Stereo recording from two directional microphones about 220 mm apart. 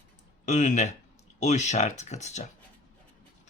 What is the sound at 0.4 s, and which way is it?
Speech, 35° left (ahead or behind).